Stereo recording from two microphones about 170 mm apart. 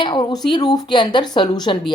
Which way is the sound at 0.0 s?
25° left (ahead or behind).